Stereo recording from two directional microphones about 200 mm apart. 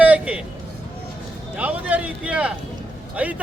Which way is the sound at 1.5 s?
5° right (ahead or behind).